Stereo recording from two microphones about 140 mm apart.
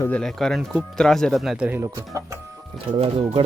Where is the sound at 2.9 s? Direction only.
40° right (ahead or behind).